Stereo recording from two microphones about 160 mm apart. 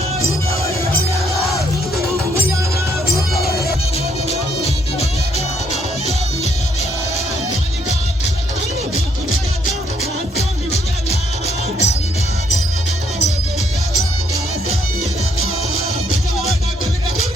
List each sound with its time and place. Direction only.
3.3 s music: 75° left (ahead or behind)
10.3 s music: 40° left (ahead or behind)